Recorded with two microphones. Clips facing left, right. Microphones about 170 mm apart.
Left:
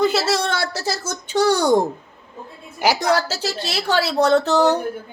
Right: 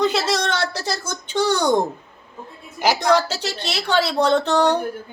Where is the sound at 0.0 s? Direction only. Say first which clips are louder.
Left 1 dB; 5° left (ahead or behind).